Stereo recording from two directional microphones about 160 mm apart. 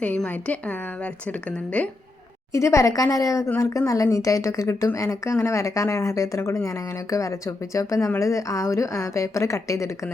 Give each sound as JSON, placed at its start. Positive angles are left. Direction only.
{"t": 0.0, "sound": "a woman's voice", "side_deg": 10}
{"t": 2.5, "sound": "speech", "side_deg": 20}